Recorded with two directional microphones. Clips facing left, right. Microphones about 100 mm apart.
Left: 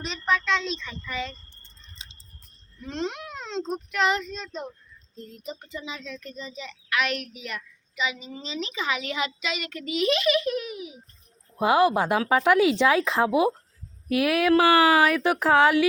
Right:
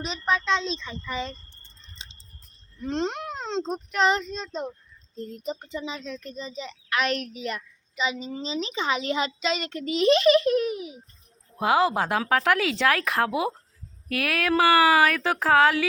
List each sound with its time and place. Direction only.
0.0 s a child's voice: 20° right (ahead or behind)
2.8 s a child's voice: 35° right (ahead or behind)
11.6 s speech: 15° left (ahead or behind)